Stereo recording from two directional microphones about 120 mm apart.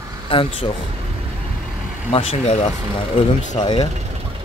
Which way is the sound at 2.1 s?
50° left (ahead or behind).